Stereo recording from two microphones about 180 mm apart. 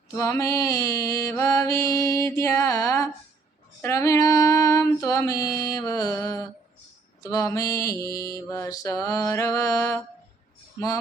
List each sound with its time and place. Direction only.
0.2 s mantra: 15° left (ahead or behind)
3.8 s female singing: 15° left (ahead or behind)
7.2 s mantra: 15° left (ahead or behind)